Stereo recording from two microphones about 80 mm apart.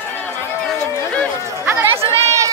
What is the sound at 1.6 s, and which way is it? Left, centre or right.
Chatter, right.